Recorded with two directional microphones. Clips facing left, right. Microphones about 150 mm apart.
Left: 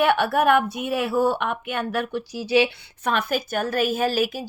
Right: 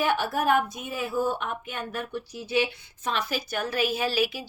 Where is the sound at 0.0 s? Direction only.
65° left (ahead or behind).